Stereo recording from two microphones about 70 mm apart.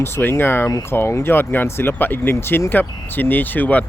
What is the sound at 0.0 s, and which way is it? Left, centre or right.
Speech, left.